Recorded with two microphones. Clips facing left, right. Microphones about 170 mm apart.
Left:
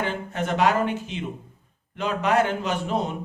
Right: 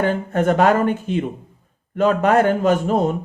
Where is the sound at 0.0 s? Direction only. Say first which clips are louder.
Right 9 dB; 50° right (ahead or behind).